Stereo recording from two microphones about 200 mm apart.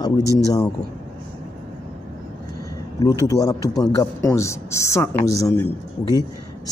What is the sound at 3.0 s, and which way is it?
Speech, 15° left (ahead or behind).